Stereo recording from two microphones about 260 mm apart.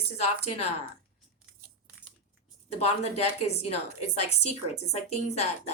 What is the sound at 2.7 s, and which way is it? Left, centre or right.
A woman's voice, left.